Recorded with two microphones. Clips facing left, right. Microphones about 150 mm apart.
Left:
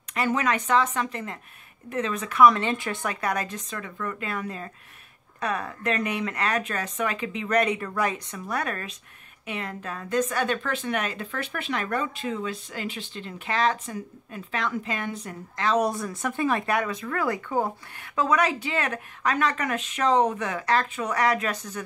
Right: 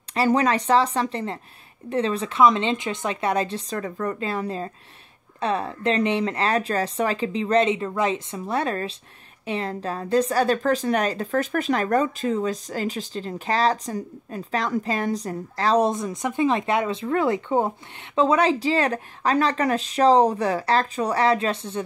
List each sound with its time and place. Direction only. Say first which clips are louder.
0.1 s a woman's voice: right 5 dB; 35° right (ahead or behind)
15.9 s speech: right 3 dB; 20° right (ahead or behind)